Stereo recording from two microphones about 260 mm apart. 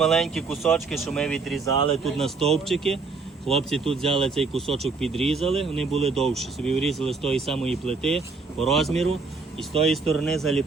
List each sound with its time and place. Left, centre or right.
0.0 s speech: centre
5.9 s speech: right
6.1 s speech: centre